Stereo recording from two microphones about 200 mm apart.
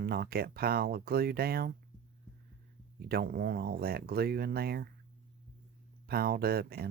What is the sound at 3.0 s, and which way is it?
Speech, 50° right (ahead or behind).